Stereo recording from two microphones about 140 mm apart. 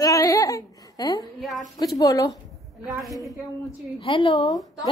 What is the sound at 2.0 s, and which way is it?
Speech, 25° left (ahead or behind).